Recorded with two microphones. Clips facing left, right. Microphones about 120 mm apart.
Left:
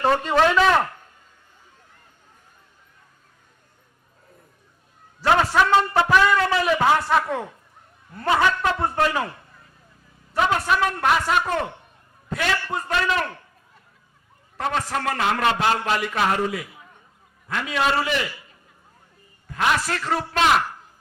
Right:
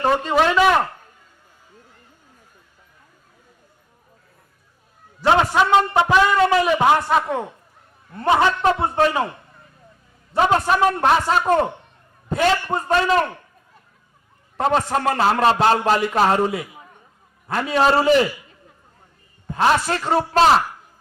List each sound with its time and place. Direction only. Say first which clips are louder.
0.0 s a man's voice: right 1 dB; 5° right (ahead or behind)
5.2 s a man's voice: right 2 dB; 20° right (ahead or behind)
10.3 s a man's voice: right 4 dB; 35° right (ahead or behind)
14.5 s a man's voice: right 6 dB; 30° right (ahead or behind)
19.5 s a man's voice: right 5 dB; 30° right (ahead or behind)